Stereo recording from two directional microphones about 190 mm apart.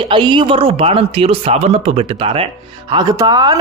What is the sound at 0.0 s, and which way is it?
Speech, 25° right (ahead or behind).